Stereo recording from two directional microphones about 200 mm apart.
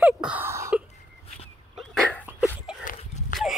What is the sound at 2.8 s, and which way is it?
Dog, 40° left (ahead or behind).